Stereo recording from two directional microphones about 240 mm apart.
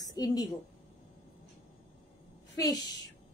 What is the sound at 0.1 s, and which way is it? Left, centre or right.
Speech, centre.